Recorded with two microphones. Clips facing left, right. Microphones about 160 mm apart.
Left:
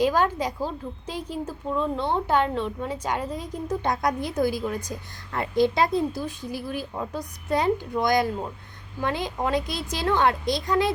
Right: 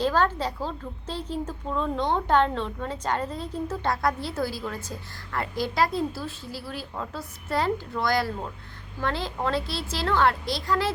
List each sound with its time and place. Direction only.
0.0 s a woman's voice: 15° left (ahead or behind)